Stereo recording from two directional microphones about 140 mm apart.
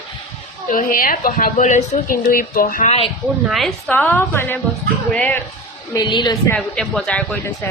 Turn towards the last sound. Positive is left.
turn(degrees=10)  # may be behind; listen again after turning